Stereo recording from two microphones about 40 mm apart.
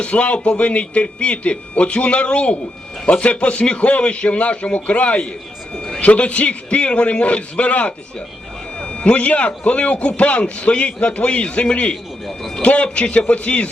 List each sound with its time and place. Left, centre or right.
0.0 s a man's voice: left
12.2 s a sound: centre
12.6 s a man's voice: left